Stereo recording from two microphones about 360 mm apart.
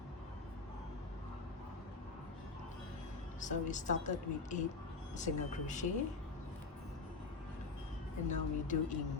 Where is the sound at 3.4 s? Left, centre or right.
Left.